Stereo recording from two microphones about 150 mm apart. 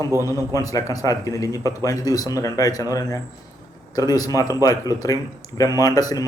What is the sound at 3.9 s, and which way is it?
Speech, 25° left (ahead or behind).